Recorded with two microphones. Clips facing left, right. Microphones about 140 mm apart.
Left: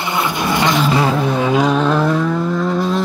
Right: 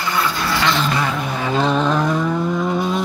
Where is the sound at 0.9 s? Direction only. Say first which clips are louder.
Left 6 dB; 25° left (ahead or behind).